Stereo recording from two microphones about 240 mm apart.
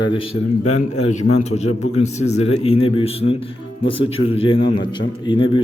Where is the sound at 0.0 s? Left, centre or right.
Left.